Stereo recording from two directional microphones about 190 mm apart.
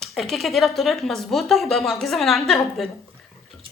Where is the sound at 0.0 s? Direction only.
Centre (ahead or behind).